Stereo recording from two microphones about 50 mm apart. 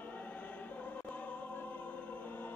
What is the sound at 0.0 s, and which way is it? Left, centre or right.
Music, left.